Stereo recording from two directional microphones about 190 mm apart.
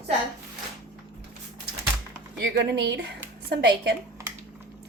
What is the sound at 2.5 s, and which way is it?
A woman's voice, 65° right (ahead or behind).